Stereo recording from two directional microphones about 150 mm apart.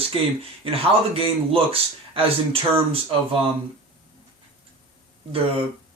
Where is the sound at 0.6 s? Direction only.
40° right (ahead or behind).